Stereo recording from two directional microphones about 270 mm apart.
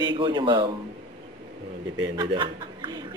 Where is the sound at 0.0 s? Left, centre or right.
Centre.